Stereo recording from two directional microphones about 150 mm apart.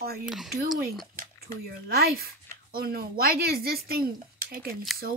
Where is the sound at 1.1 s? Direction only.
85° right.